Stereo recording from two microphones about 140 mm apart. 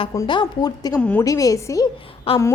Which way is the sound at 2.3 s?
40° left (ahead or behind).